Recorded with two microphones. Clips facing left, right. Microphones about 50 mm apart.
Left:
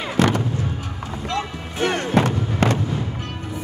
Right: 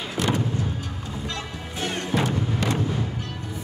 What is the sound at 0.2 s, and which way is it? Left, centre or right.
Music, left.